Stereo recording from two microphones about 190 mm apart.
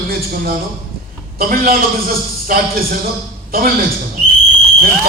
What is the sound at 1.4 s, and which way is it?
A man's voice, 50° right (ahead or behind).